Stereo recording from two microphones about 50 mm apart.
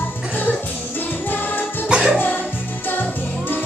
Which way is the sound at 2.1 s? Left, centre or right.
Left.